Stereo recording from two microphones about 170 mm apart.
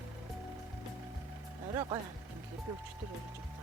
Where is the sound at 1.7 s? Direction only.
25° right (ahead or behind).